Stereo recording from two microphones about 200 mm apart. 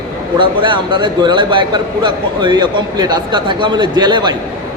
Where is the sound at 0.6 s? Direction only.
25° right (ahead or behind).